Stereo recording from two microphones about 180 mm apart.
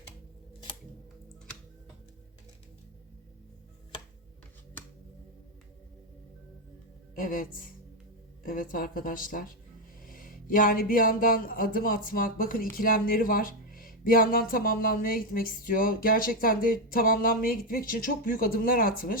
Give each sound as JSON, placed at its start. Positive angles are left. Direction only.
{"t": 7.2, "sound": "speech", "side_deg": 50}